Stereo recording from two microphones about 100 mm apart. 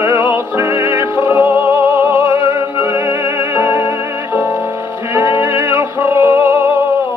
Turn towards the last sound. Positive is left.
turn(degrees=-20)  # may be behind; listen again after turning